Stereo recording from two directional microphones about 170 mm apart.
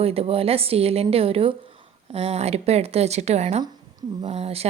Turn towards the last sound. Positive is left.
turn(degrees=-35)  # may be behind; listen again after turning